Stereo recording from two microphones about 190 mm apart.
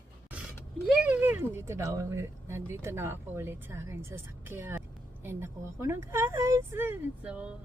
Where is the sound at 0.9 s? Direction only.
10° right (ahead or behind).